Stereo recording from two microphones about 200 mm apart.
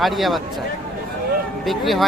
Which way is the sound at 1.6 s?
Centre (ahead or behind).